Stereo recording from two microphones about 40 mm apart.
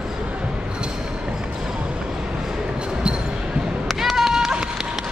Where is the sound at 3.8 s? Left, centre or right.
Centre.